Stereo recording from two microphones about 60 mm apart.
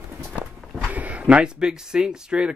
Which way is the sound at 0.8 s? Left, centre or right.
Right.